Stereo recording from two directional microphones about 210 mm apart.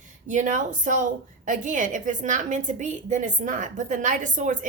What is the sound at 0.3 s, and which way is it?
A woman's voice, 35° right (ahead or behind).